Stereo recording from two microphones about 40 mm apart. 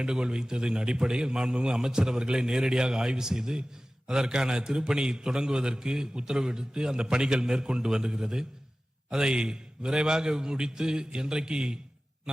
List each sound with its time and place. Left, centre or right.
0.0 s a man's voice: right